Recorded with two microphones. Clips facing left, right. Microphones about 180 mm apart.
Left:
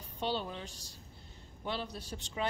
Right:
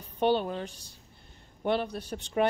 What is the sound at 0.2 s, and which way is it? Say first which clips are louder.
Speech: right 10 dB; 55° right (ahead or behind).